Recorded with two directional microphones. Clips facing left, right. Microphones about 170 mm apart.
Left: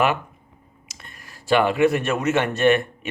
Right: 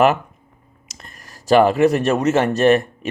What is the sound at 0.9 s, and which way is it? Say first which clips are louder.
Speech: right 3 dB; 40° right (ahead or behind).